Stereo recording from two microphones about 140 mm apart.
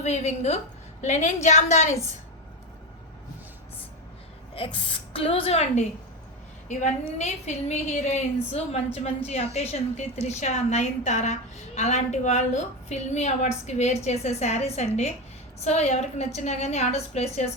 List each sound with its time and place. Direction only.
0.0 s a woman's voice: 55° left (ahead or behind)
4.5 s a woman's voice: 40° left (ahead or behind)